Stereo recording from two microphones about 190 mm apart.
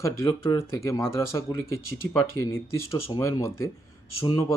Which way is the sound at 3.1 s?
15° left (ahead or behind).